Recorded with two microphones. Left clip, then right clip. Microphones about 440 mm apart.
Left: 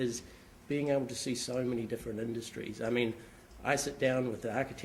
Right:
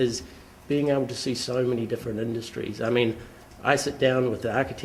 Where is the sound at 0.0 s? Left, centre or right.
Right.